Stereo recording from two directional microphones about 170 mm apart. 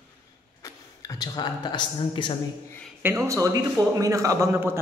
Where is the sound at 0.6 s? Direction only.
20° left (ahead or behind).